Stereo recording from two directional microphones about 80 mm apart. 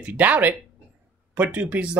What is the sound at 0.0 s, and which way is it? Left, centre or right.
Speech, centre.